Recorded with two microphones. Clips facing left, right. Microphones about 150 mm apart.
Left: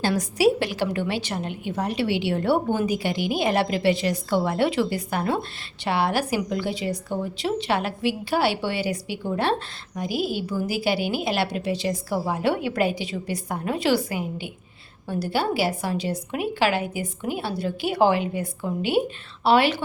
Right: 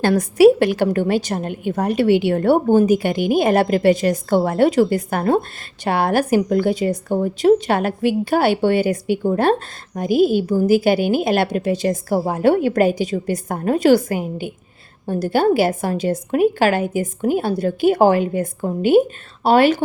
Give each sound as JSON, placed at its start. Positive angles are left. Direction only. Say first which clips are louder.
{"t": 0.0, "sound": "a woman's voice", "louder": "right 9 dB", "side_deg": -55}